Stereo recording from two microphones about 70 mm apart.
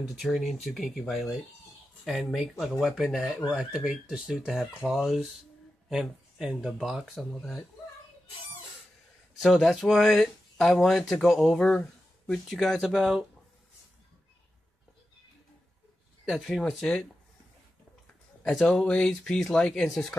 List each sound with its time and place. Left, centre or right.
0.2 s speech: centre
9.4 s speech: centre
11.5 s speech: centre
12.4 s speech: centre
16.3 s speech: centre
18.5 s speech: centre